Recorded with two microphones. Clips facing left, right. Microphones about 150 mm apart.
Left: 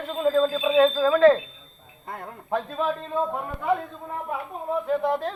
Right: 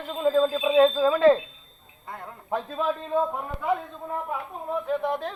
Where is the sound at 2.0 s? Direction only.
35° left (ahead or behind).